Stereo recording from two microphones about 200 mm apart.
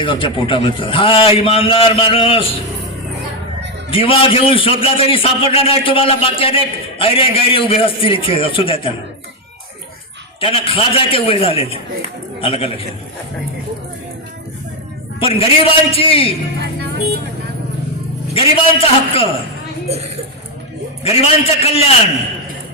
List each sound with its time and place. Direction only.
0.0 s a man's voice: 25° left (ahead or behind)
3.8 s a man's voice: 25° left (ahead or behind)
10.4 s a man's voice: 30° left (ahead or behind)
15.2 s a man's voice: 30° left (ahead or behind)
18.3 s a man's voice: 25° left (ahead or behind)
21.0 s a man's voice: 30° left (ahead or behind)